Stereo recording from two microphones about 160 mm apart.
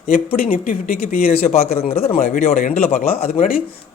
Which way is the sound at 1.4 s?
40° left (ahead or behind).